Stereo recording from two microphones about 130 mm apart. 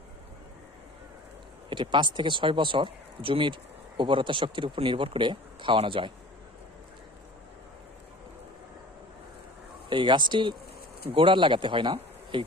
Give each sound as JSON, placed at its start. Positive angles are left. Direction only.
{"t": 1.7, "sound": "speech", "side_deg": -40}
{"t": 9.9, "sound": "speech", "side_deg": -40}